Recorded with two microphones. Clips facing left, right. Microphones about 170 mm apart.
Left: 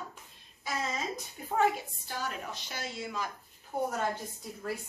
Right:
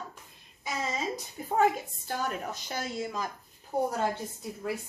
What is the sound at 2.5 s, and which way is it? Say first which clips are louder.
Speech: right 5 dB; 45° right (ahead or behind).